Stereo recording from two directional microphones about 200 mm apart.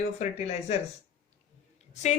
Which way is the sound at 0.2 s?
35° left (ahead or behind).